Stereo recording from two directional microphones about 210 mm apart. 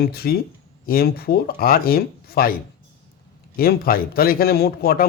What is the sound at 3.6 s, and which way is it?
A man's voice, 45° left (ahead or behind).